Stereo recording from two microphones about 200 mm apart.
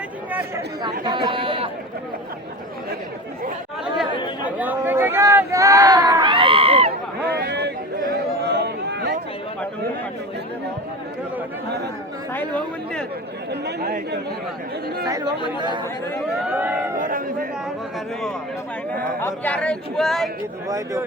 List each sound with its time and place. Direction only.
0.3 s chatter: 10° right (ahead or behind)
0.8 s speech: 20° right (ahead or behind)
4.4 s a sound: 10° right (ahead or behind); by 6.9 s 30° right (ahead or behind)
7.4 s a sound: 55° right (ahead or behind)
12.3 s speech: 5° left (ahead or behind)
13.5 s speech: 55° right (ahead or behind)
15.0 s speech: 15° right (ahead or behind)
15.4 s speech: 25° left (ahead or behind)
16.4 s speech: 10° right (ahead or behind)
16.9 s a man's voice: 40° right (ahead or behind)
19.2 s speech: 10° left (ahead or behind)
20.7 s speech: 15° right (ahead or behind)